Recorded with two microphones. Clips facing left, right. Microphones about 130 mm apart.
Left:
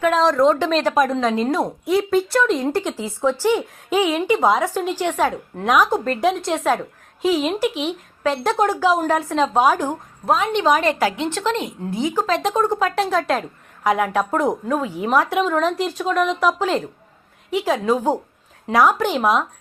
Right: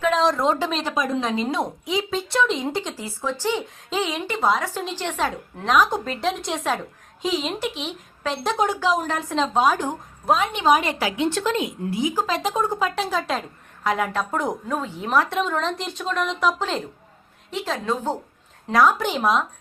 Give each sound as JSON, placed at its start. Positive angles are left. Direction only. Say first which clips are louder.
{"t": 0.0, "sound": "a woman's voice", "louder": "left 4 dB", "side_deg": 0}
{"t": 3.0, "sound": "a woman's voice", "louder": "left 7 dB", "side_deg": 15}
{"t": 10.6, "sound": "a woman's voice", "louder": "left 2 dB", "side_deg": -15}
{"t": 12.1, "sound": "a woman's voice", "louder": "left 4 dB", "side_deg": -5}
{"t": 13.8, "sound": "a woman's voice", "louder": "left 5 dB", "side_deg": 10}